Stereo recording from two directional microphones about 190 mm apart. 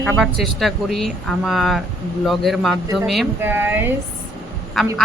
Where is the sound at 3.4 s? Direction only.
10° right (ahead or behind).